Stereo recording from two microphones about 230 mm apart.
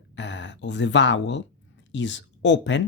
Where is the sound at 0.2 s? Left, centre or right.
Left.